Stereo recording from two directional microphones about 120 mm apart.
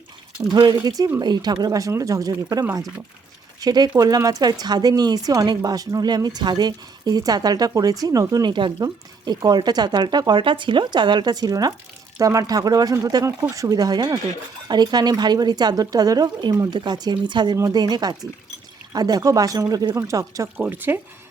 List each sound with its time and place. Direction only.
0.5 s speech: 35° right (ahead or behind)
20.6 s speech: 15° right (ahead or behind)